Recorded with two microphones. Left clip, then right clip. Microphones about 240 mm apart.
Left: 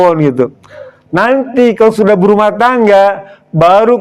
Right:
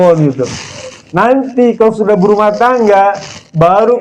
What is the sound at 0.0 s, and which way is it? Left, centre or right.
A man's voice, left.